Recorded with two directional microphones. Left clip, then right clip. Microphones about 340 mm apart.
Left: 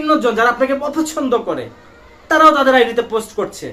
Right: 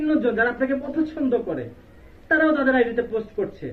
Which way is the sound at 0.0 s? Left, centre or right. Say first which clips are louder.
Left 7 dB; left.